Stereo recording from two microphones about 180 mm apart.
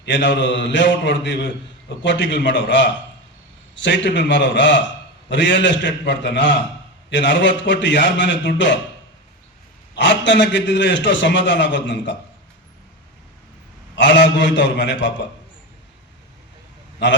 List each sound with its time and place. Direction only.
0.0 s a man's voice: 85° left
9.9 s a man's voice: 80° left
13.9 s a man's voice: 90° left
17.0 s a man's voice: 80° left